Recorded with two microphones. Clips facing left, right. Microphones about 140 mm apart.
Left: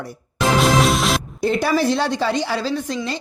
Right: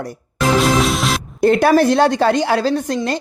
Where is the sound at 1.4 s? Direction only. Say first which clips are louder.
Right 8 dB; 55° right (ahead or behind).